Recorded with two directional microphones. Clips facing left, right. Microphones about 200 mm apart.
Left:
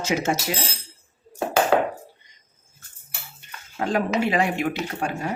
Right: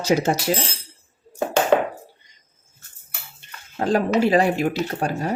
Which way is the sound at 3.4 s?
30° right (ahead or behind).